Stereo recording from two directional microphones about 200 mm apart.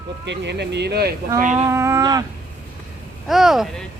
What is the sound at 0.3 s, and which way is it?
Speech, 60° right (ahead or behind).